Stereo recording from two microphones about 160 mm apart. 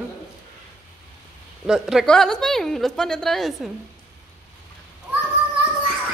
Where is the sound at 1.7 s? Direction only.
5° right (ahead or behind).